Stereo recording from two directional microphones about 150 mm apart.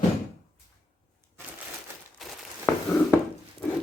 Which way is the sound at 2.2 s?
Centre (ahead or behind).